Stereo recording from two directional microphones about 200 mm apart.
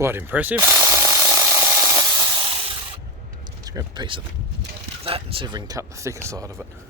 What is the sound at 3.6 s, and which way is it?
Speech, 20° right (ahead or behind).